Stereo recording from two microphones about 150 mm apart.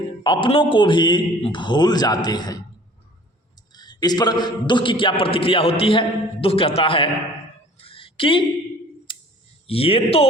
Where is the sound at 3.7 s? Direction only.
30° left (ahead or behind).